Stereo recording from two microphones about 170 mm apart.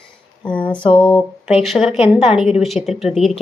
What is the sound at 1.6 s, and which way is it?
A woman's voice, centre (ahead or behind).